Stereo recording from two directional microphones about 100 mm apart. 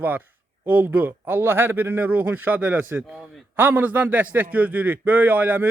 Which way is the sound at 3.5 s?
20° right (ahead or behind).